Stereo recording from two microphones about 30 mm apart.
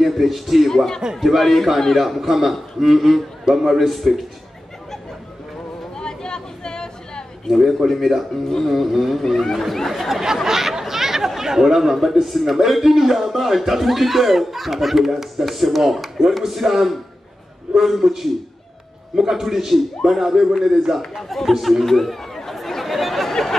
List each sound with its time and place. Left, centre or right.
0.0 s a man's voice: centre
5.9 s chatter: left
7.4 s speech: centre
10.2 s speech: centre
17.7 s a man's voice: right
18.0 s a man's voice: centre
21.2 s speech: centre
21.8 s chatter: centre